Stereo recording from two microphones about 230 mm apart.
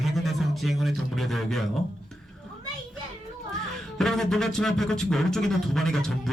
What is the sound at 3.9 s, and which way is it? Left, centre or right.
Speech, centre.